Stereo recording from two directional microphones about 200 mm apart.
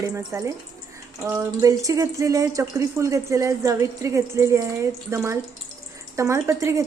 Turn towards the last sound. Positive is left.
turn(degrees=-15)  # may be behind; listen again after turning